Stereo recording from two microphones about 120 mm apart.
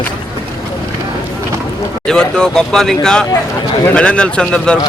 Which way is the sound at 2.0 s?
5° left (ahead or behind).